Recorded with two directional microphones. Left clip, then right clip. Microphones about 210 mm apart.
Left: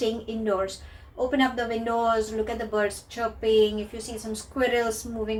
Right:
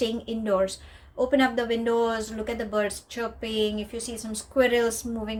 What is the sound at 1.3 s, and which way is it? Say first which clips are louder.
Speech: right 2 dB; 45° right (ahead or behind).